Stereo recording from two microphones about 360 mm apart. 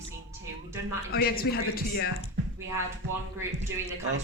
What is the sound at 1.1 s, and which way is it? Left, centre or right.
Speech, left.